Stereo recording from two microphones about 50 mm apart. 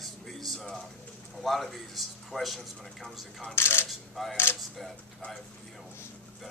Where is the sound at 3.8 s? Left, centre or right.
Centre.